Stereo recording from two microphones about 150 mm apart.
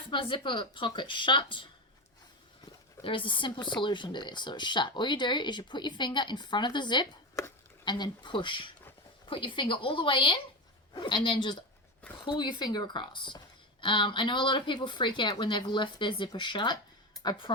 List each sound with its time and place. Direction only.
0.1 s speech: 35° left (ahead or behind)
3.0 s speech: 35° left (ahead or behind)